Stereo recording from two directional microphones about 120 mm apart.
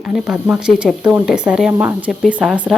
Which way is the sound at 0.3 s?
5° right (ahead or behind).